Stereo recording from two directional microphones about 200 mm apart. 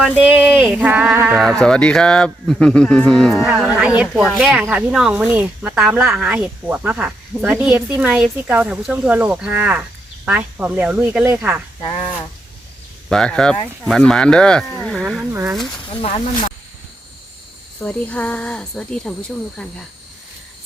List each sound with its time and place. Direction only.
0.0 s speech: 5° right (ahead or behind)
1.4 s speech: centre (ahead or behind)
11.8 s speech: 25° left (ahead or behind)
13.1 s speech: 5° left (ahead or behind)
15.0 s speech: 10° right (ahead or behind)
16.0 s speech: 30° left (ahead or behind)
17.7 s speech: 5° left (ahead or behind)